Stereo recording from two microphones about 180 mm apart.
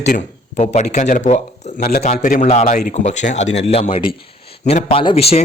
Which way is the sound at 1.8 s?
60° left (ahead or behind).